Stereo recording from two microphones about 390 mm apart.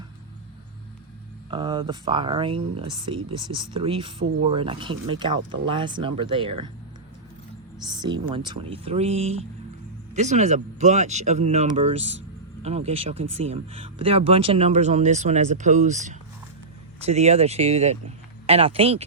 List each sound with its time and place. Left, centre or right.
1.5 s speech: centre
7.9 s speech: centre